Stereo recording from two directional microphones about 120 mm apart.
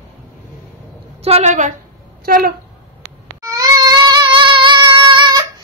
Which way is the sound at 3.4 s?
30° right (ahead or behind).